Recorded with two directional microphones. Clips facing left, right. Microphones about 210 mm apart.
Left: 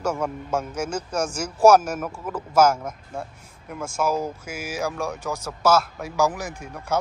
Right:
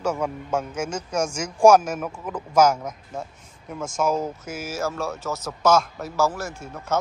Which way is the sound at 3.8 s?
10° left (ahead or behind).